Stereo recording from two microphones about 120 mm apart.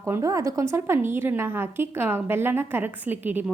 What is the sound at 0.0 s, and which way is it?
A woman's voice, 25° right (ahead or behind).